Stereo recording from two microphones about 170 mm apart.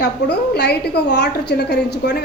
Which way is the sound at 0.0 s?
75° left (ahead or behind).